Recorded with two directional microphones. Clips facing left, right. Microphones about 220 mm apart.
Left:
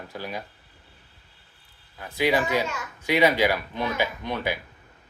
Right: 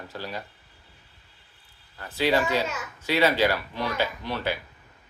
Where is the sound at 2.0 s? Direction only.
10° left (ahead or behind).